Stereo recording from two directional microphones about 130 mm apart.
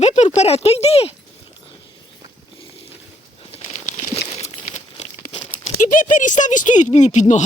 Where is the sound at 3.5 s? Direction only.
55° left (ahead or behind).